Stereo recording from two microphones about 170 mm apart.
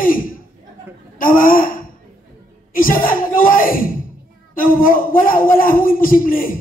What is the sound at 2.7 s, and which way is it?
A woman's voice, 55° left (ahead or behind).